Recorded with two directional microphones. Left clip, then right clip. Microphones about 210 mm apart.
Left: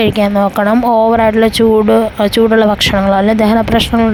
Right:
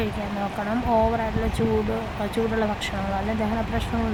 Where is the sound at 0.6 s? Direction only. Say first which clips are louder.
Left 10 dB; 45° left (ahead or behind).